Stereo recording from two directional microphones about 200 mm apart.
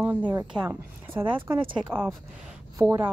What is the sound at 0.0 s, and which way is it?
Speech, 10° right (ahead or behind).